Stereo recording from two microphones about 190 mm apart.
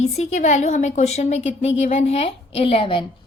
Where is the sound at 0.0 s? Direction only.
35° left (ahead or behind).